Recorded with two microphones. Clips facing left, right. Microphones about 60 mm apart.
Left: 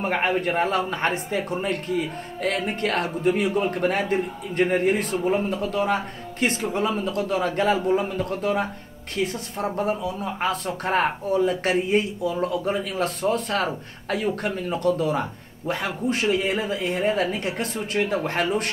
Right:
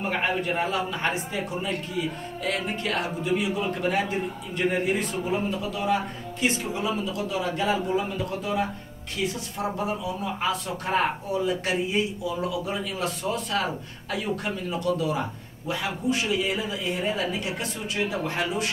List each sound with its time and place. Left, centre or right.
0.0 s speech: left